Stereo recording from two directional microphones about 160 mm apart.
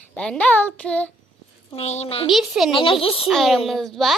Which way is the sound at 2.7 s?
35° left (ahead or behind).